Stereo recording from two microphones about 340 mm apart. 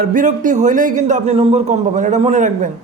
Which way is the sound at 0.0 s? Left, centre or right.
Right.